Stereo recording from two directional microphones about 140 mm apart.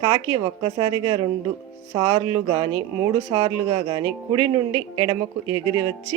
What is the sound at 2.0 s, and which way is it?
Music, 45° right (ahead or behind).